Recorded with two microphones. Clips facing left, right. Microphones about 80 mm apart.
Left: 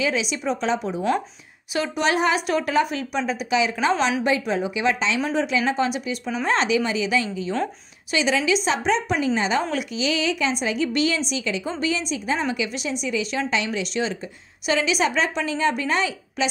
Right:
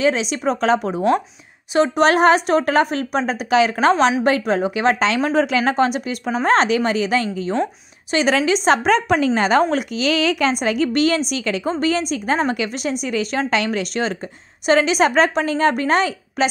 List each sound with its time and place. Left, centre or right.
0.0 s a woman's voice: right
1.7 s a woman's voice: right
2.0 s a woman's voice: right
8.6 s a woman's voice: right